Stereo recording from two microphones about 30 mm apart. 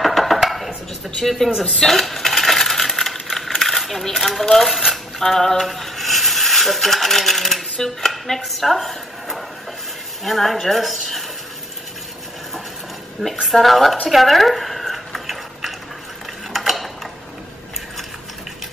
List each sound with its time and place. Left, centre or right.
0.0 s dishes: centre
1.8 s coin: centre
4.2 s a woman's voice: centre
5.2 s a sound: centre
5.6 s coin: centre
7.8 s a woman's voice: centre
13.2 s a woman's voice: centre
14.1 s a sound: centre
16.5 s mechanisms: centre